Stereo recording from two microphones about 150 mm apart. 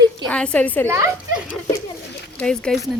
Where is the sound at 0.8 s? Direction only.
20° right (ahead or behind).